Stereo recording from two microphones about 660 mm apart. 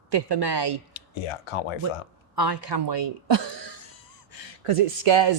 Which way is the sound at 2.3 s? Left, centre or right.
Right.